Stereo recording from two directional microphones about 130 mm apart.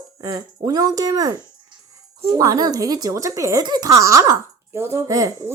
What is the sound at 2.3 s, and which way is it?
A woman's voice, 30° right (ahead or behind).